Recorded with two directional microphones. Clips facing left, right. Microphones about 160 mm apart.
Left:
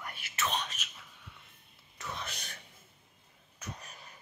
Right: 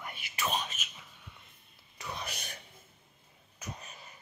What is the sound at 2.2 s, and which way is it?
Whispering, 15° right (ahead or behind).